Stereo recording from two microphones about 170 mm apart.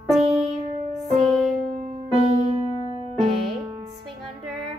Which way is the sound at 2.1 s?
35° right (ahead or behind).